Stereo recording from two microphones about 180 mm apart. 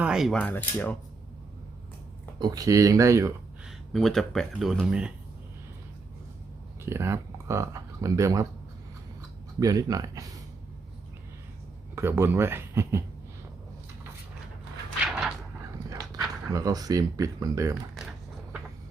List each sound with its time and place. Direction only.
0.0 s speech: 5° right (ahead or behind)
2.4 s speech: 20° right (ahead or behind)
3.7 s speech: centre (ahead or behind)
6.8 s speech: 15° right (ahead or behind)
9.6 s speech: 20° right (ahead or behind)
11.9 s speech: 15° right (ahead or behind)
16.5 s speech: 20° right (ahead or behind)